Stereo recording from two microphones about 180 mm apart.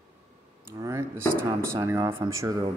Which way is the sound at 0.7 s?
15° right (ahead or behind).